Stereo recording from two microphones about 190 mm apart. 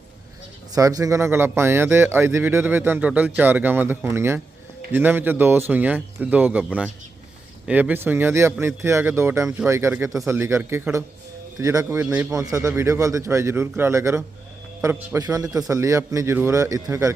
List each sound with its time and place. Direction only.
0.7 s speech: 20° right (ahead or behind)